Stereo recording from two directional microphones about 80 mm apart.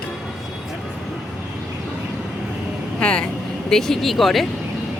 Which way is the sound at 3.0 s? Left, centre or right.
Centre.